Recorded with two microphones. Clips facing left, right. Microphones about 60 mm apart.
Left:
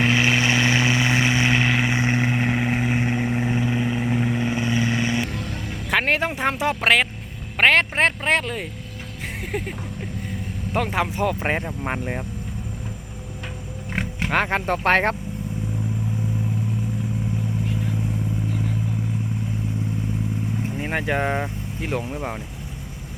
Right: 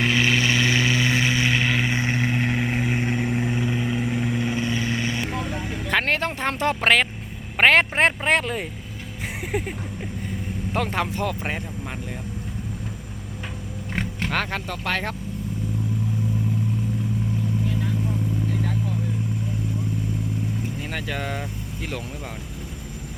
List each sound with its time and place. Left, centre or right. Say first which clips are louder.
0.0 s vehicle: left 1 dB; left
5.3 s vehicle: right 3 dB; centre
5.9 s music: left 2 dB; centre
7.6 s speech: even; centre
10.8 s speech: left 2 dB; centre
11.3 s speech: left 5 dB; left
13.9 s roaring cats: left 1 dB; centre
14.3 s speech: left 6 dB; left
14.7 s speech: left 8 dB; left
20.7 s speech: left 5 dB; left